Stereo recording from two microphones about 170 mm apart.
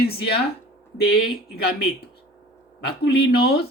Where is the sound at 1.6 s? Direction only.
70° left (ahead or behind).